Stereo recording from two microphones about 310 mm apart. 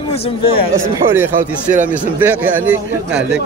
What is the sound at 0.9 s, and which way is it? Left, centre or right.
Speech, centre.